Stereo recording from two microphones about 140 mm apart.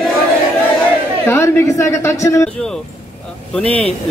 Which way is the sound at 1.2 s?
20° left (ahead or behind).